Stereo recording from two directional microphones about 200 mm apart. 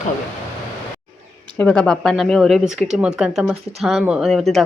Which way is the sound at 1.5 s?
5° left (ahead or behind).